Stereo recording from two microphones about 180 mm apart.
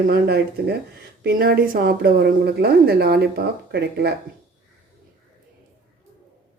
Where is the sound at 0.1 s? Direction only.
60° right (ahead or behind).